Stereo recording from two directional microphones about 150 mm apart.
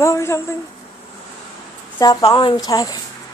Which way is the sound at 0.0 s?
20° left (ahead or behind).